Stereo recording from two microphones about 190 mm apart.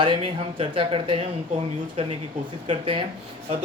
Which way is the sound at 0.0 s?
25° right (ahead or behind).